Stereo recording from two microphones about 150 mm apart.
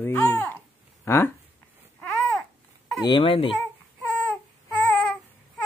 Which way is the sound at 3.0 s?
30° left (ahead or behind).